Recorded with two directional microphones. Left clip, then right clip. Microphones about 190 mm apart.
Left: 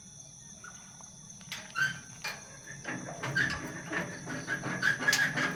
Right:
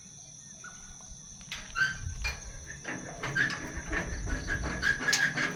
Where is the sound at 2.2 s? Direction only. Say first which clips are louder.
Right 2 dB; 20° left (ahead or behind).